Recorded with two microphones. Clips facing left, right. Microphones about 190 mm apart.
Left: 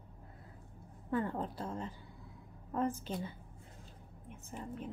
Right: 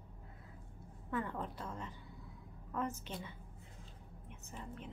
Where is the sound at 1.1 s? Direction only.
35° left (ahead or behind).